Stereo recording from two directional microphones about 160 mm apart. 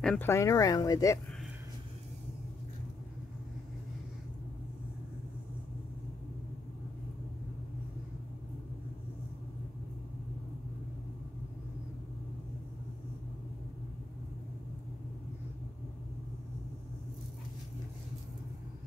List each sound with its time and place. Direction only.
0.0 s speech: 5° left (ahead or behind)
0.3 s speech: 20° left (ahead or behind)